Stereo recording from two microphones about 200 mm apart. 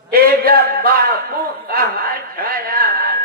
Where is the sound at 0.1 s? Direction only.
50° right (ahead or behind).